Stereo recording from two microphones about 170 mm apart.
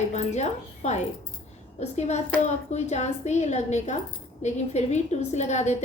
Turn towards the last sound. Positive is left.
turn(degrees=40)  # may be behind; listen again after turning